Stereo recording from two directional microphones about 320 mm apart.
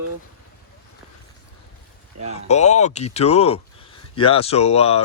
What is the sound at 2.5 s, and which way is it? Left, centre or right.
Speech, left.